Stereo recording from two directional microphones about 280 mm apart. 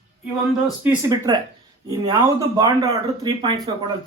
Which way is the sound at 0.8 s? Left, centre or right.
Centre.